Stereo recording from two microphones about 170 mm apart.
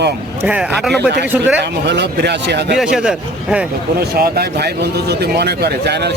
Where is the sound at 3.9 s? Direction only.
60° right (ahead or behind).